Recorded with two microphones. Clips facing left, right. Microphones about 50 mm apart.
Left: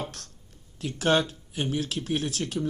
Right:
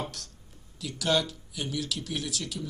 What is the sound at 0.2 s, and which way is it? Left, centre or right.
Speech, left.